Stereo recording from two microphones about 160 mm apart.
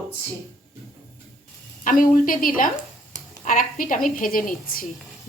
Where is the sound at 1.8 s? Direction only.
55° left (ahead or behind).